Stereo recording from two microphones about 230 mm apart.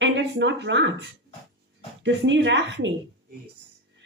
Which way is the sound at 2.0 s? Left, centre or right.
Right.